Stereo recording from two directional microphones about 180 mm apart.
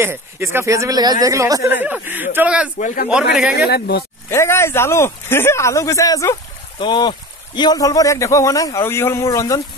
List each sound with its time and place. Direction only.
0.0 s a man's voice: 15° right (ahead or behind)
2.8 s speech: 45° left (ahead or behind)
3.1 s a man's voice: 5° right (ahead or behind)
3.5 s speech: 65° left (ahead or behind)
4.3 s a man's voice: 15° left (ahead or behind)